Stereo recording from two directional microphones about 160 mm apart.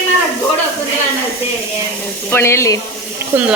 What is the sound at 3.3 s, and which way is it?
Speech, 15° right (ahead or behind).